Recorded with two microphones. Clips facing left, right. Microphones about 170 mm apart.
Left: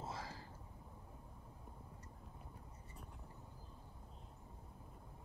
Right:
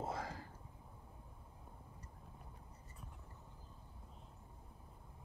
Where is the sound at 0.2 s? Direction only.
30° left (ahead or behind).